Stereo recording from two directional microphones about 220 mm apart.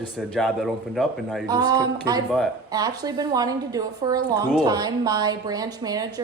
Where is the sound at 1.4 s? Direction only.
20° right (ahead or behind).